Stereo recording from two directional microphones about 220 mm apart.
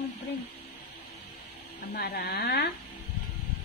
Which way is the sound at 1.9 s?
45° left (ahead or behind).